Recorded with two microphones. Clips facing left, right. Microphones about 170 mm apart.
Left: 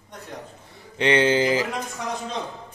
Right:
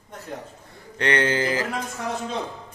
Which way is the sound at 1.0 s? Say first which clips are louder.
Left 3 dB; 20° left (ahead or behind).